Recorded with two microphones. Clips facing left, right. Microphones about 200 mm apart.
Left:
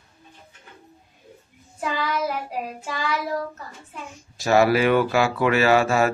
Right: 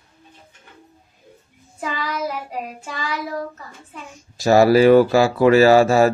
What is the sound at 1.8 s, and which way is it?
Child singing, centre (ahead or behind).